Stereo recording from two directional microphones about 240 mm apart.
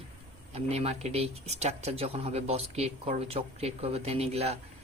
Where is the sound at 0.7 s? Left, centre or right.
Right.